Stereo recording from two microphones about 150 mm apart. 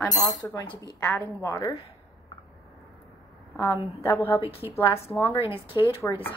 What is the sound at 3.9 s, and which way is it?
Speech, 20° left (ahead or behind).